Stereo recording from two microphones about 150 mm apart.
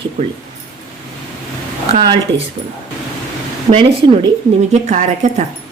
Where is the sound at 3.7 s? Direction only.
40° right (ahead or behind).